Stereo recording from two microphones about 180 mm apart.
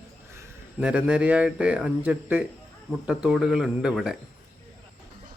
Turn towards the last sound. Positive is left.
turn(degrees=-5)  # may be behind; listen again after turning